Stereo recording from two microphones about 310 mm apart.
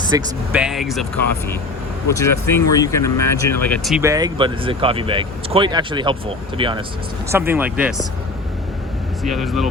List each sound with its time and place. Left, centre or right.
0.1 s speech: centre
2.0 s speech: centre
9.2 s speech: centre